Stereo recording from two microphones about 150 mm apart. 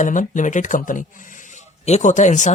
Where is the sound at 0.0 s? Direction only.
60° left (ahead or behind).